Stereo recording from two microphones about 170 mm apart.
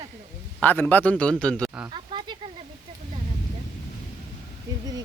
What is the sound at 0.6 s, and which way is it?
A man's voice, 10° left (ahead or behind).